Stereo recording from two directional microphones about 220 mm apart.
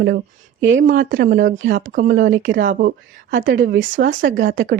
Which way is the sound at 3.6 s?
40° right (ahead or behind).